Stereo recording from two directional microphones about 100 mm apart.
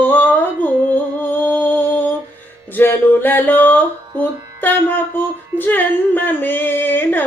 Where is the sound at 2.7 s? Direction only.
20° left (ahead or behind).